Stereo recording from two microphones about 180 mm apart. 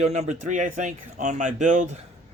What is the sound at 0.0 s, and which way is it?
Speech, 40° right (ahead or behind).